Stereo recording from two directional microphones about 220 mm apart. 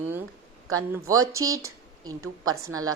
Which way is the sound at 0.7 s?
15° right (ahead or behind).